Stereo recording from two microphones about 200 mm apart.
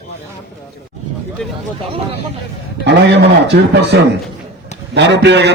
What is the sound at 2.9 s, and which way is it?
A man's voice, 55° right (ahead or behind).